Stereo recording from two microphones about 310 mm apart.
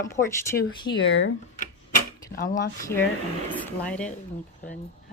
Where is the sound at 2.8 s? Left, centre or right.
Centre.